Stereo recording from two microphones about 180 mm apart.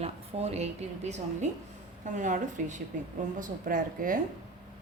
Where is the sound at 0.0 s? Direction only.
35° right (ahead or behind).